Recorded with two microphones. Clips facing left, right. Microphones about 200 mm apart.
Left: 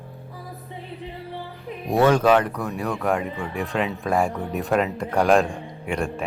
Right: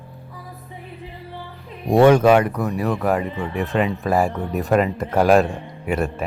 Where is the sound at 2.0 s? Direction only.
10° right (ahead or behind).